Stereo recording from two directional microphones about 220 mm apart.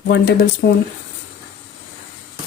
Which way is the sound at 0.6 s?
45° left (ahead or behind).